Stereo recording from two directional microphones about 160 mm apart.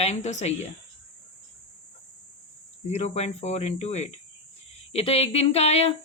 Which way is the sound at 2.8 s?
45° left (ahead or behind).